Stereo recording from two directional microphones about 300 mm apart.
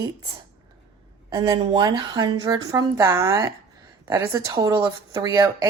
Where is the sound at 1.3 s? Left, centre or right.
Centre.